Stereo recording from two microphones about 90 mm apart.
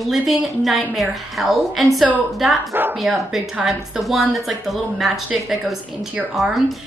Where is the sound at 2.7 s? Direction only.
20° right (ahead or behind).